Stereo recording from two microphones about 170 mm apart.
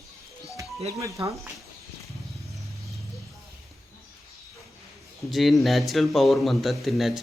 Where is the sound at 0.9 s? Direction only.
20° right (ahead or behind).